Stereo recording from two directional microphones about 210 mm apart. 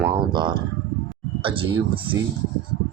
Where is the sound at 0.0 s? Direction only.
20° right (ahead or behind).